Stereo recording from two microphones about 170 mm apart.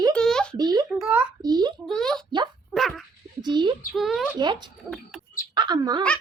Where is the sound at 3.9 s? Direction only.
Centre (ahead or behind).